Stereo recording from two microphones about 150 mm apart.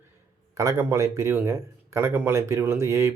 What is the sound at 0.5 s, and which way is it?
Speech, 20° right (ahead or behind).